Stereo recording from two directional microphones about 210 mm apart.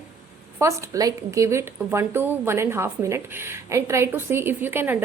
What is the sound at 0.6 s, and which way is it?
A woman's voice, 15° right (ahead or behind).